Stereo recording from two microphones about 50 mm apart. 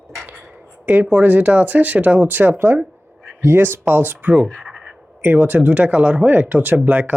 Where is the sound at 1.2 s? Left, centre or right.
Right.